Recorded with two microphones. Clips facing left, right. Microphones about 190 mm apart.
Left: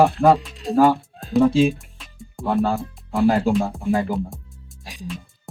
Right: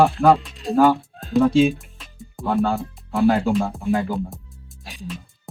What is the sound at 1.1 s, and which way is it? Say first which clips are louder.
Music: even; centre (ahead or behind).